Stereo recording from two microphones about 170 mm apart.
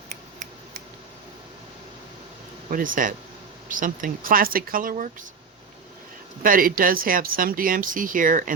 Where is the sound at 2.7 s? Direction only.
55° right (ahead or behind).